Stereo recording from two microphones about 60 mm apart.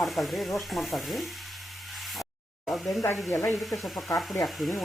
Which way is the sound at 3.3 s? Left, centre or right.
Left.